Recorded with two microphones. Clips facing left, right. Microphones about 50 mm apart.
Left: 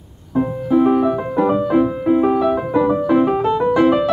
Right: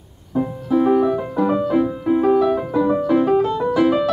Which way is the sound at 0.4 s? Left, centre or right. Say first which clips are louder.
Left 3 dB; centre.